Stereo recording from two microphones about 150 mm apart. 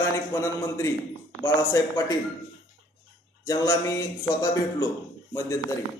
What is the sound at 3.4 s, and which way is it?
A man's voice, 20° left (ahead or behind).